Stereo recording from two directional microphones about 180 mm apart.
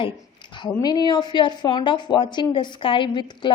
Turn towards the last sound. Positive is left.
turn(degrees=25)  # may be behind; listen again after turning